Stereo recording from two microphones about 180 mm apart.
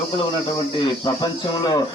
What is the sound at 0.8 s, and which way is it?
Speech, 25° left (ahead or behind).